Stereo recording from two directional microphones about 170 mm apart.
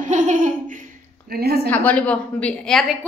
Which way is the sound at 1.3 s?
70° right (ahead or behind).